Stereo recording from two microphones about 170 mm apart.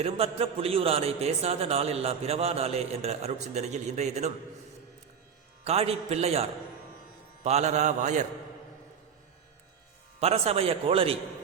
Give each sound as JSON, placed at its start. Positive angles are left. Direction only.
{"t": 0.0, "sound": "a man's voice", "side_deg": -35}
{"t": 5.6, "sound": "a man's voice", "side_deg": -35}
{"t": 10.2, "sound": "a man's voice", "side_deg": -35}